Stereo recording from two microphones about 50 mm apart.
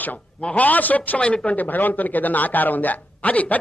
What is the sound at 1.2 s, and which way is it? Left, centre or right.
Speech, left.